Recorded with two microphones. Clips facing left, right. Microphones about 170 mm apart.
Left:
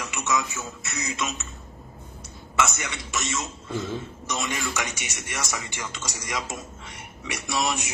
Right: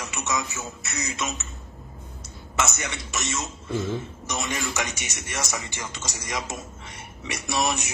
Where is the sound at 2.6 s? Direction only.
20° right (ahead or behind).